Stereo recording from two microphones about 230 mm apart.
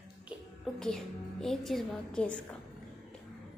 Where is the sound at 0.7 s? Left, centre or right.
Centre.